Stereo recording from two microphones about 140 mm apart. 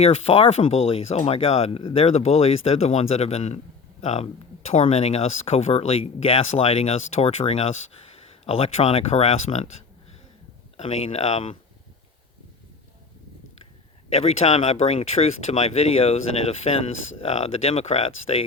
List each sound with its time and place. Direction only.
0.0 s speech: 45° left (ahead or behind)
10.8 s speech: 50° left (ahead or behind)
14.1 s speech: 50° left (ahead or behind)